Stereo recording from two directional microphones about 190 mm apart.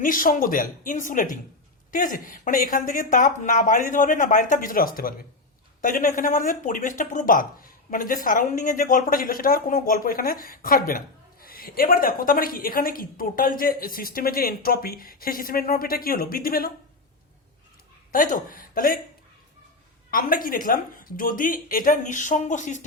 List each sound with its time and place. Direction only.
0.0 s speech: 45° left (ahead or behind)
18.1 s speech: 45° left (ahead or behind)
20.1 s speech: 50° left (ahead or behind)